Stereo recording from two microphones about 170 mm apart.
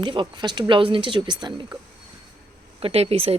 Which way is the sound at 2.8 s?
35° right (ahead or behind).